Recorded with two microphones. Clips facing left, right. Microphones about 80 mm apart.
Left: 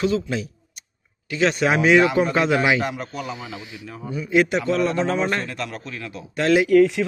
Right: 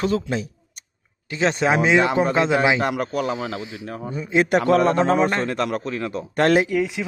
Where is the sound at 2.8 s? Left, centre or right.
Right.